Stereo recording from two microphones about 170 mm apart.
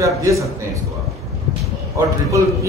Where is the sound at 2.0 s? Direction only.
15° right (ahead or behind).